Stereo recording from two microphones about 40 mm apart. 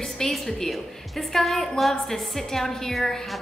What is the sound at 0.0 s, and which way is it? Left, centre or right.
A woman's voice, centre.